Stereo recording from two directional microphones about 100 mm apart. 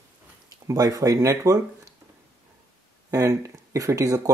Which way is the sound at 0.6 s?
40° right (ahead or behind).